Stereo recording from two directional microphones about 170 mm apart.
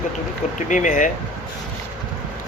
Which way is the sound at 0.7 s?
45° left (ahead or behind).